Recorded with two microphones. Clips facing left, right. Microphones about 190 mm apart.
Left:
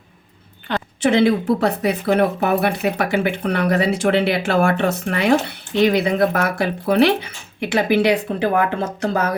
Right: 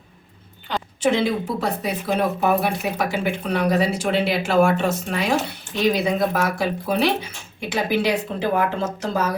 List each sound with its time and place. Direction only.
0.9 s speech: 60° left (ahead or behind)